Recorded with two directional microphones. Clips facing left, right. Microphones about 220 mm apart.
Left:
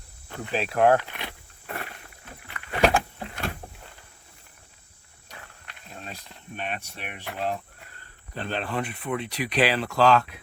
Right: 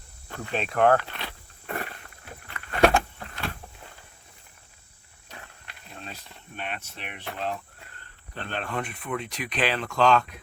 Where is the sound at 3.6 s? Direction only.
45° left (ahead or behind).